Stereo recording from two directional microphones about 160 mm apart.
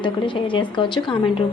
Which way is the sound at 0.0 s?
30° left (ahead or behind).